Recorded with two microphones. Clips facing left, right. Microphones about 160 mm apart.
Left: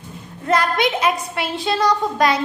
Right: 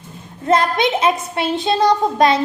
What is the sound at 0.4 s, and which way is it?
A woman's voice, 25° right (ahead or behind).